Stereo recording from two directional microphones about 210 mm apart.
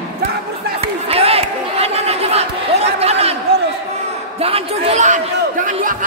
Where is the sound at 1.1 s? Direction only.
30° right (ahead or behind).